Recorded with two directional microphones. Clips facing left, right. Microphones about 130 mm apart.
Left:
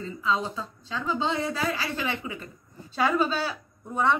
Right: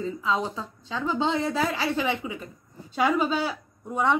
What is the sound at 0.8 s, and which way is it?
A woman's voice, 20° right (ahead or behind).